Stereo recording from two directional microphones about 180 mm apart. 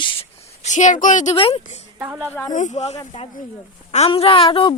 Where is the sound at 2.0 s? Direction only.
10° right (ahead or behind).